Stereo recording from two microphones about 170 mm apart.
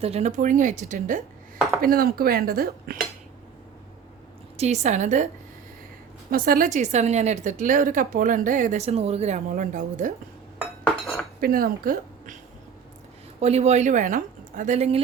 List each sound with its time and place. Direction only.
0.0 s a woman's voice: 40° right (ahead or behind)
1.8 s speech: 60° right (ahead or behind)
4.5 s a woman's voice: 40° right (ahead or behind)
6.3 s a woman's voice: 55° right (ahead or behind)
11.3 s speech: 60° right (ahead or behind)
13.4 s a woman's voice: 40° right (ahead or behind)